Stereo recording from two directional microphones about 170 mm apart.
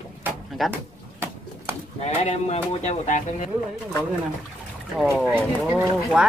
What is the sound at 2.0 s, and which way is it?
Speech, 40° left (ahead or behind).